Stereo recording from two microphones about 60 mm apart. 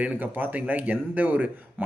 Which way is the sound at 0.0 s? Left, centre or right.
Right.